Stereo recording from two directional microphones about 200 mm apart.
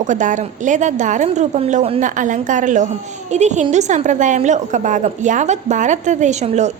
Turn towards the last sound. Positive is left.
turn(degrees=-35)  # may be behind; listen again after turning